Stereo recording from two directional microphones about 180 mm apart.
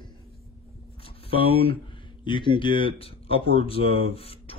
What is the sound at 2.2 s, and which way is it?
Speech, 25° left (ahead or behind).